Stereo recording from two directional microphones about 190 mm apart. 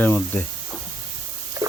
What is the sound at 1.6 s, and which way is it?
Rodents, 20° right (ahead or behind).